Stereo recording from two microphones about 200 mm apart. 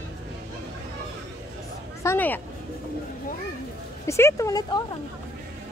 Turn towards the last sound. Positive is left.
turn(degrees=15)  # may be behind; listen again after turning